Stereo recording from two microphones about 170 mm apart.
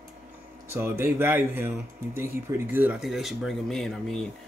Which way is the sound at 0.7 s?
15° right (ahead or behind).